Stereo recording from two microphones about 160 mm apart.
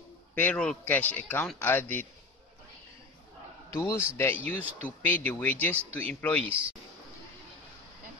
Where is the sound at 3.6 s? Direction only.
15° left (ahead or behind).